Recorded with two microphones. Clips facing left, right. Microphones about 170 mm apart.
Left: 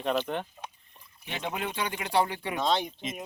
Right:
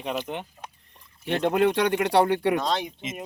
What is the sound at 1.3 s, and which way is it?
Speech, 65° right (ahead or behind).